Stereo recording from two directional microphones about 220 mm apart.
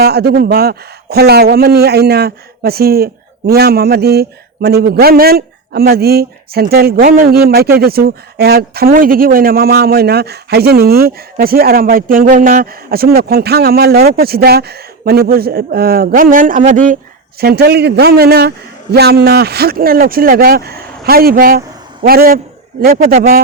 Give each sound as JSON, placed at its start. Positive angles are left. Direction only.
{"t": 0.0, "sound": "a man's voice", "side_deg": -45}